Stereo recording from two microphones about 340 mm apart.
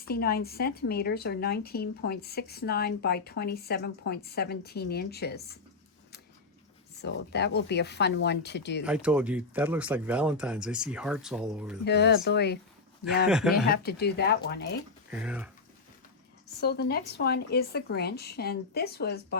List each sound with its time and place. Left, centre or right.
0.1 s speech: left
7.0 s speech: left
8.8 s speech: centre
11.9 s speech: left
13.2 s speech: centre
13.7 s speech: left
15.1 s speech: centre
16.6 s speech: left